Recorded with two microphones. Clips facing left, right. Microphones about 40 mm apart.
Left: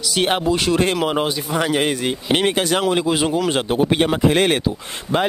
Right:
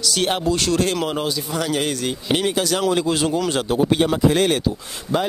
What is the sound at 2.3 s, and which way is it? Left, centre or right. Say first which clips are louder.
Speech: left 2 dB; left.